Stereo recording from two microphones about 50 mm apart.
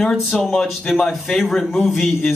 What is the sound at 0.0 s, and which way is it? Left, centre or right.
A man's voice, centre.